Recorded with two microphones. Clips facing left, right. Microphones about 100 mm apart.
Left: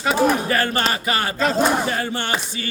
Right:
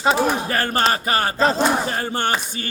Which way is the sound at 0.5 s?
40° right (ahead or behind).